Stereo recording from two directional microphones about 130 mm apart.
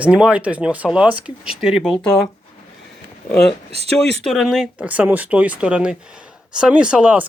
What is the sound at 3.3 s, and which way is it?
Speech, 5° left (ahead or behind).